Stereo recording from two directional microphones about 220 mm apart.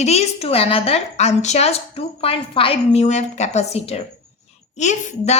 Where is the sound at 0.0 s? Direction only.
30° left (ahead or behind).